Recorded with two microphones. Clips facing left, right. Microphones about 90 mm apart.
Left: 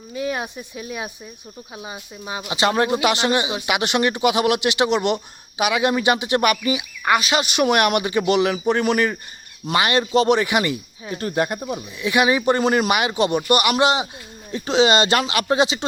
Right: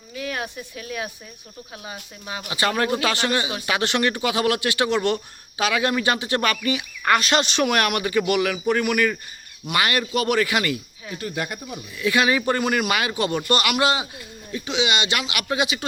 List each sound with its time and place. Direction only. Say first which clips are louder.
0.1 s speech: left 4 dB; 25° left (ahead or behind)
11.2 s speech: left 7 dB; 35° left (ahead or behind)
14.5 s speech: left 7 dB; 40° left (ahead or behind)